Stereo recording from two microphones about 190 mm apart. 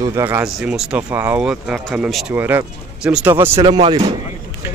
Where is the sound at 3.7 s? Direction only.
25° right (ahead or behind).